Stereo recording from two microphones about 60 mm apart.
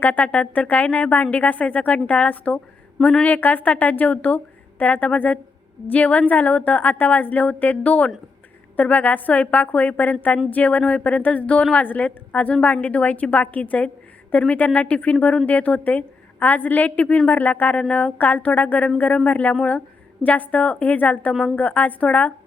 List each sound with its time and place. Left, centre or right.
0.0 s a woman's voice: left
3.2 s a woman's voice: left
12.5 s a woman's voice: centre
12.8 s a woman's voice: left